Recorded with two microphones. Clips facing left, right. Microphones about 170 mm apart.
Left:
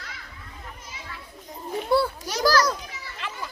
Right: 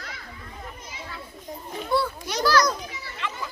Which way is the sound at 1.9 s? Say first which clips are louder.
Left 3 dB; 35° left (ahead or behind).